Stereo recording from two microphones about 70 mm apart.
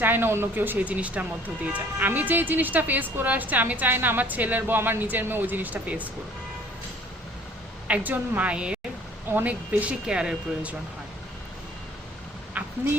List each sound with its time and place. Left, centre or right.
0.0 s speech: right
7.9 s a woman's voice: right
12.6 s a sound: right